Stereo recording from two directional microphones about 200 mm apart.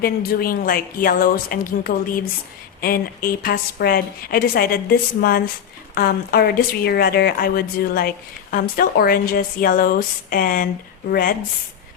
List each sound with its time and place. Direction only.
0.0 s a woman's voice: 50° left (ahead or behind)